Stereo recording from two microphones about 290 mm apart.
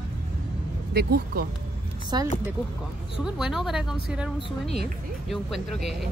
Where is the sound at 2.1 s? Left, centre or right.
Centre.